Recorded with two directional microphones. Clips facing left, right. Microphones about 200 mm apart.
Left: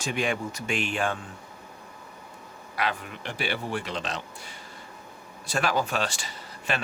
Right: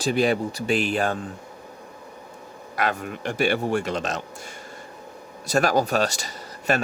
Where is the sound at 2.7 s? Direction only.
45° right (ahead or behind).